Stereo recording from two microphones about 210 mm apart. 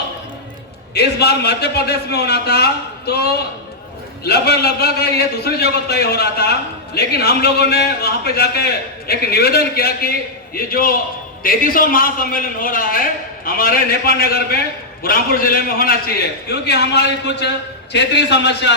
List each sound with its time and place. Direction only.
0.9 s a man's voice: 50° left (ahead or behind)